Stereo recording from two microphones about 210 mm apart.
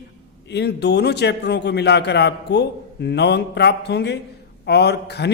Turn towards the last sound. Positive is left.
turn(degrees=50)  # may be behind; listen again after turning